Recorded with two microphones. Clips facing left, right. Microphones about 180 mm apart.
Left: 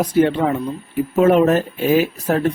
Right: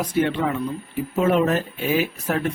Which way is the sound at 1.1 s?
50° left (ahead or behind).